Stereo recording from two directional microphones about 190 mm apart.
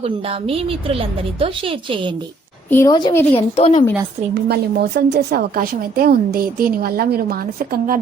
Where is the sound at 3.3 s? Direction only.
35° left (ahead or behind).